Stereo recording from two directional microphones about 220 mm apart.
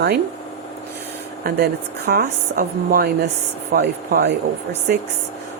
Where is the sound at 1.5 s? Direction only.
40° right (ahead or behind).